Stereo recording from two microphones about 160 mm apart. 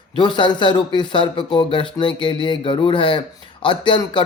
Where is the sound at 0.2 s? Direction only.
30° left (ahead or behind).